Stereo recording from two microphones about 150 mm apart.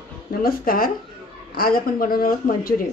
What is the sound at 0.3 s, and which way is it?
A woman's voice, 80° left.